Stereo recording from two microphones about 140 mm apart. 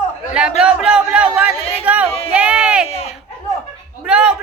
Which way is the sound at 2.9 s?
45° left (ahead or behind).